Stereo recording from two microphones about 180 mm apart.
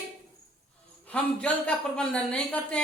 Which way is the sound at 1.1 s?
5° left (ahead or behind).